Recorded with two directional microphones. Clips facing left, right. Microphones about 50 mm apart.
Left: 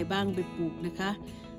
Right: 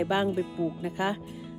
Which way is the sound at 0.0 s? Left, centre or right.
Right.